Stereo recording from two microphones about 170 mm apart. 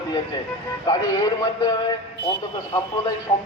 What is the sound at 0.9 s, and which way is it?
Speech, 25° left (ahead or behind).